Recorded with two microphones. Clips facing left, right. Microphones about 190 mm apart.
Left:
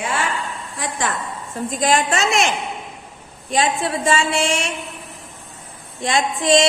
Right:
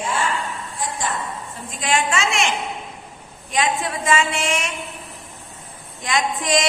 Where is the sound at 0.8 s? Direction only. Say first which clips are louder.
Left 2 dB; 70° left (ahead or behind).